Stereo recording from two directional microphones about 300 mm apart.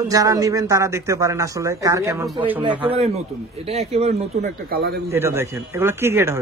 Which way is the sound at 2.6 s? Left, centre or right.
Centre.